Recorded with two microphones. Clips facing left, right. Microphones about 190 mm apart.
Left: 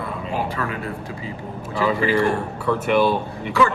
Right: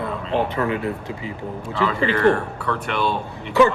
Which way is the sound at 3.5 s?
20° right (ahead or behind).